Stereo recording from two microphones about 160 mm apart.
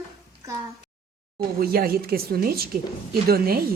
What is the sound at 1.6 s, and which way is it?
A woman's voice, 70° right (ahead or behind).